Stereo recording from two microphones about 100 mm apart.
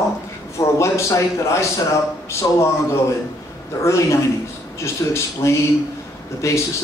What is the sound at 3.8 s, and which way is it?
A man's voice, 30° left (ahead or behind).